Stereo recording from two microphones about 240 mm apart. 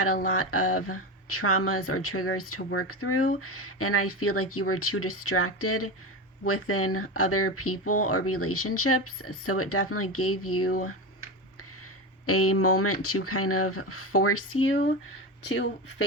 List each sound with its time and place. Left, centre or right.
0.3 s speech: left
12.2 s speech: left